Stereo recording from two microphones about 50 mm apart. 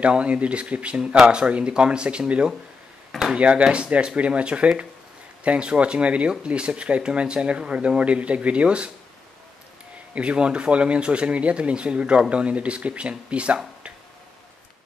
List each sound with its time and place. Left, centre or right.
0.1 s speech: right
3.1 s a sound: centre
3.3 s speech: right
10.1 s speech: right